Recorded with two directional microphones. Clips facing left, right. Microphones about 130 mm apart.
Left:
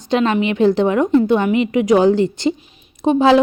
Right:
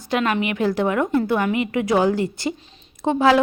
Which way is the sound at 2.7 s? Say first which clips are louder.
Left 6 dB; 15° left (ahead or behind).